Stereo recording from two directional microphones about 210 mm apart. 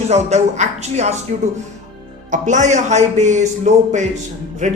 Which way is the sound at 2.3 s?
35° right (ahead or behind).